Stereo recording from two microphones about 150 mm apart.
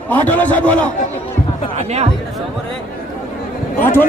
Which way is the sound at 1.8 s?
45° right (ahead or behind).